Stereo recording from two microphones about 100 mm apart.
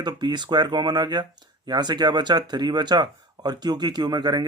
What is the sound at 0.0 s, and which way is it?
Speech, 45° right (ahead or behind).